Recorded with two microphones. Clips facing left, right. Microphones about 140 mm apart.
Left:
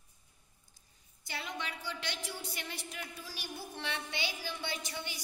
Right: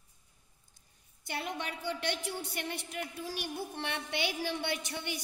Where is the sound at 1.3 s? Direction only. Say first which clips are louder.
Right 4 dB; 55° right (ahead or behind).